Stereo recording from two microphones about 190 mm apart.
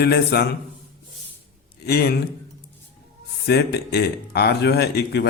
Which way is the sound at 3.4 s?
60° left (ahead or behind).